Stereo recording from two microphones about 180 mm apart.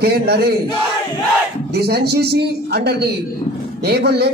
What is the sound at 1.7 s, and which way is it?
A man's voice, 65° right (ahead or behind).